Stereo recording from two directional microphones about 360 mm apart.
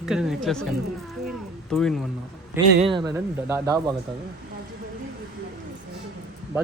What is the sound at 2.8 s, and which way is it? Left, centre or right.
Speech, centre.